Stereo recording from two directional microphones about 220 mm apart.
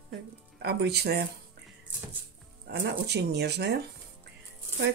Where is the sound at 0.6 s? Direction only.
45° right (ahead or behind).